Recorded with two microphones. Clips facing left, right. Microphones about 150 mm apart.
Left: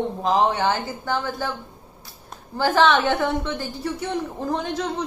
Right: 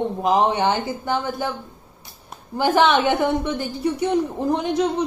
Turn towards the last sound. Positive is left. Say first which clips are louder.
# right 5 dB
turn(degrees=-15)  # may be behind; listen again after turning